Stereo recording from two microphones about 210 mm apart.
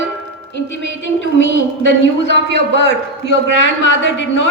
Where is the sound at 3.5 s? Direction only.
60° left (ahead or behind).